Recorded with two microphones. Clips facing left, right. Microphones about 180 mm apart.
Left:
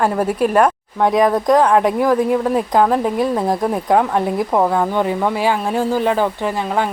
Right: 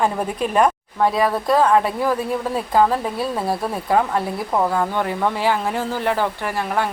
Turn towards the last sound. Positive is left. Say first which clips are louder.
# left 5 dB
turn(degrees=15)  # may be behind; listen again after turning